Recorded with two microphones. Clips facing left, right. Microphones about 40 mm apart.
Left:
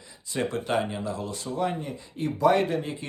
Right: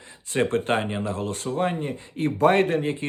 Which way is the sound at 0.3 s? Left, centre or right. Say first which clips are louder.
Right 4 dB; right.